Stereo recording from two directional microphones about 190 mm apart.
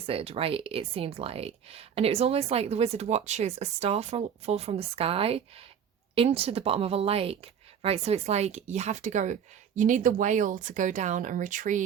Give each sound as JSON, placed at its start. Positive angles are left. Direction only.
{"t": 0.0, "sound": "speech", "side_deg": -30}